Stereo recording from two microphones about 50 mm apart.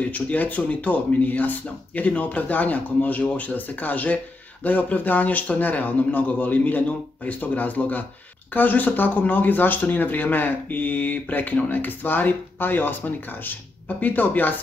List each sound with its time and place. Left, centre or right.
0.0 s speech: left